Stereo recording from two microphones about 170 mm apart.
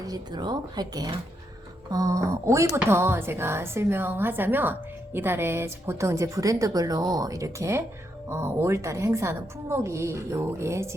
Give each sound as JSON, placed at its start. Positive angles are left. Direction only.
{"t": 0.1, "sound": "speech", "side_deg": -25}